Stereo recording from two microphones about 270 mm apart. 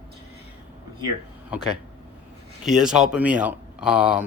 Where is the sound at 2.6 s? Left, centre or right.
Centre.